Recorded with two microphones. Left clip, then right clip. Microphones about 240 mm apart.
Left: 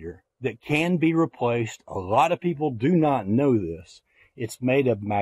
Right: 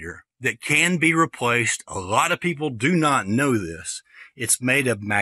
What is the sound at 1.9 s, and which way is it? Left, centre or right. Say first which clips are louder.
Speech: left 2 dB; right.